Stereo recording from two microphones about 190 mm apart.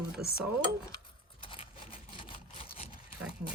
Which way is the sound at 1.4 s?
25° left (ahead or behind).